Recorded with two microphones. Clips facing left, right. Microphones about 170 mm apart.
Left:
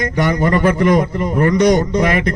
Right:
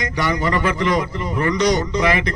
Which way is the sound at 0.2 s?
50° left (ahead or behind).